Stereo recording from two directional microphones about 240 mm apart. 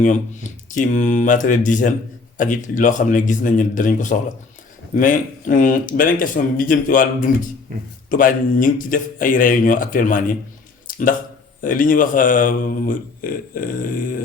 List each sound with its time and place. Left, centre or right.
0.7 s speech: left
11.6 s speech: left